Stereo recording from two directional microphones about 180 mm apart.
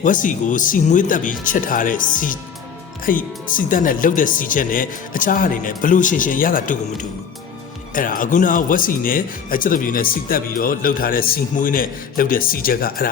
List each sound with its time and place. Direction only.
0.0 s speech: 45° left (ahead or behind)
7.9 s speech: 50° left (ahead or behind)